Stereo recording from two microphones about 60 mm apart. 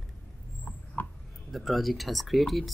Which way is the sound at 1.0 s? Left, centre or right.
Left.